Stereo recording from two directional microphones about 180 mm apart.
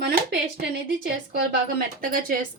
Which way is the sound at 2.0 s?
50° right (ahead or behind).